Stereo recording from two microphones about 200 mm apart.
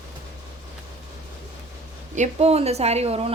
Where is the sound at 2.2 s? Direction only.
30° right (ahead or behind).